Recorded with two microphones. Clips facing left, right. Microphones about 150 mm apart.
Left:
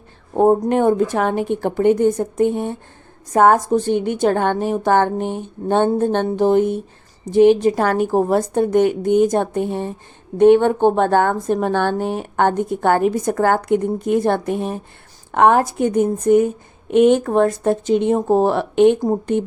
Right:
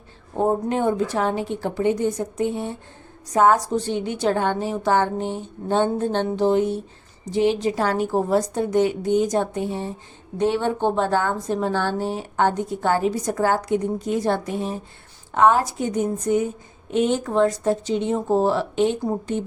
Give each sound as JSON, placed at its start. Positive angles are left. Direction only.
{"t": 0.3, "sound": "a woman's voice", "side_deg": 50}